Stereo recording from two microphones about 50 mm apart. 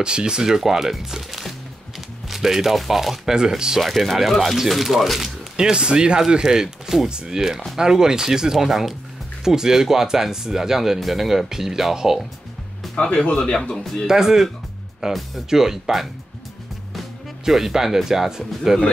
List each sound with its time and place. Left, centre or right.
0.0 s speech: centre
3.8 s speech: centre
5.6 s speech: centre
12.9 s speech: left
14.0 s speech: centre
17.5 s speech: centre